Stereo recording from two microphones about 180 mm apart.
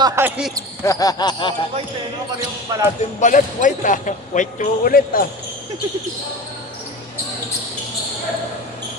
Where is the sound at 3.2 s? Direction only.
45° left (ahead or behind).